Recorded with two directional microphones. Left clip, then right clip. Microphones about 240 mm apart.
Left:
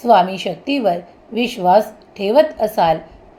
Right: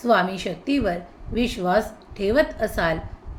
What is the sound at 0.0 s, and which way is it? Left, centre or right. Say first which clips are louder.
A woman's voice: left 7 dB; centre.